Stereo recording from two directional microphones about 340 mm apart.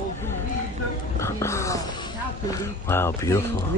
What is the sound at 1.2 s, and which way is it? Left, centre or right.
Music, centre.